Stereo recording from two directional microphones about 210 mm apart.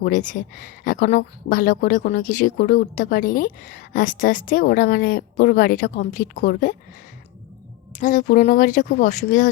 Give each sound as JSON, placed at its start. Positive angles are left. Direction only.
{"t": 0.0, "sound": "speech", "side_deg": 40}
{"t": 7.9, "sound": "speech", "side_deg": 40}